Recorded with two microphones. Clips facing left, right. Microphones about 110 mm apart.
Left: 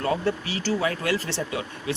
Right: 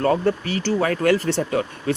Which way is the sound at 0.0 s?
50° right (ahead or behind).